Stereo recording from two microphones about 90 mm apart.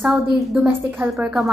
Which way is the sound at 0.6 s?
25° right (ahead or behind).